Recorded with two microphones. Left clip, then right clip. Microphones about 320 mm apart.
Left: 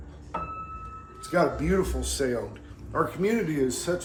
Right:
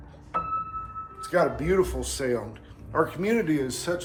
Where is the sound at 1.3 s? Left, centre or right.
Right.